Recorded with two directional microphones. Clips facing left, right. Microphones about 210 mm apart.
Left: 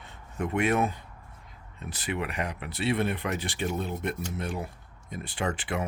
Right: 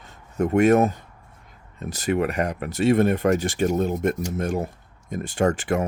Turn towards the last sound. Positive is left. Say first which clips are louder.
# right 9 dB
turn(degrees=-45)  # may be behind; listen again after turning